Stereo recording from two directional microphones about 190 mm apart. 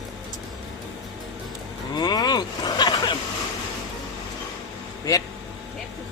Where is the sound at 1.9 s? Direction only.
20° left (ahead or behind).